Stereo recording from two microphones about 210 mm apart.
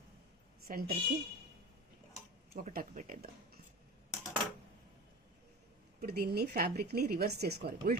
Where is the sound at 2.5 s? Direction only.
40° right (ahead or behind).